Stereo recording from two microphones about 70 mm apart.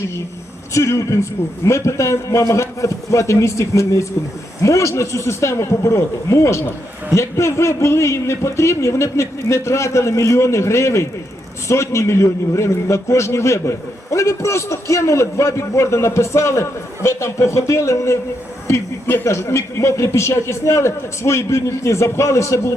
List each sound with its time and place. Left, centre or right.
0.7 s a man's voice: left
18.7 s a sound: left
19.2 s a man's voice: left